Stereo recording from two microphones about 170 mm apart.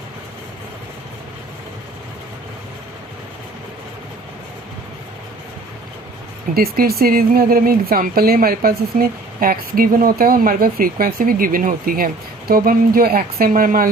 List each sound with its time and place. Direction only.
6.5 s speech: 60° right (ahead or behind)